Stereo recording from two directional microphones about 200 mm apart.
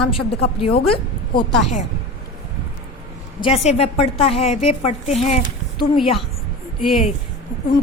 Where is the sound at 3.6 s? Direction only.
30° left (ahead or behind).